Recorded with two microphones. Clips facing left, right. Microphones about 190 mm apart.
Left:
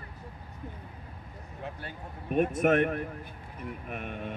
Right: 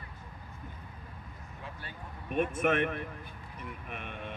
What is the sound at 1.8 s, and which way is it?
Speech, 40° left (ahead or behind).